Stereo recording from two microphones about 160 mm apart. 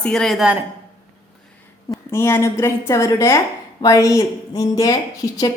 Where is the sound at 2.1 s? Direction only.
15° left (ahead or behind).